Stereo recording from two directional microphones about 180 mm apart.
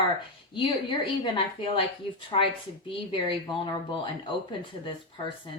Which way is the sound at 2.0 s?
30° left (ahead or behind).